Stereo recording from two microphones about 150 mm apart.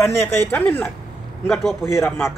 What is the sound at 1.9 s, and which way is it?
Speech, 20° left (ahead or behind).